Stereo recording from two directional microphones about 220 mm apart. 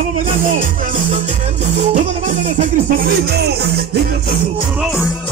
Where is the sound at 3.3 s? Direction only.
50° right (ahead or behind).